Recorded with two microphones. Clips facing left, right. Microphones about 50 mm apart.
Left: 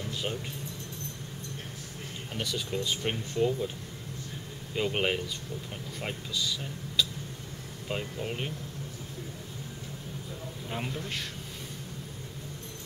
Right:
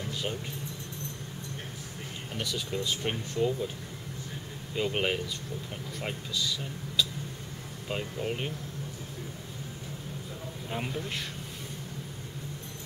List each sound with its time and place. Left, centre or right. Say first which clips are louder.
0.1 s music: even; centre
2.3 s speech: left 1 dB; centre
4.7 s speech: even; centre
10.7 s speech: right 1 dB; centre